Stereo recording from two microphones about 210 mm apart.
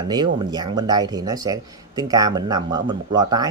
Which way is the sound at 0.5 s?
20° right (ahead or behind).